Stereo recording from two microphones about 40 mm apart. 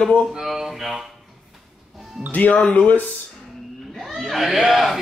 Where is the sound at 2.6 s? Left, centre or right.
Left.